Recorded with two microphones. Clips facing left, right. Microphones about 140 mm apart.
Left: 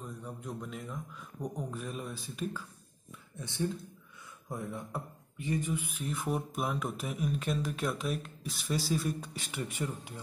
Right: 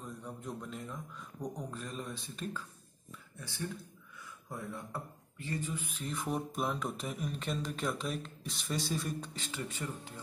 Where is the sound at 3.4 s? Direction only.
20° left (ahead or behind).